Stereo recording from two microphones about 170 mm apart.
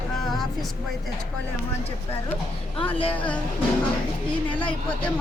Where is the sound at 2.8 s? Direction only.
35° left (ahead or behind).